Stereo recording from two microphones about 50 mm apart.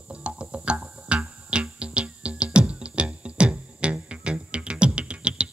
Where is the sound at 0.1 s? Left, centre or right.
Right.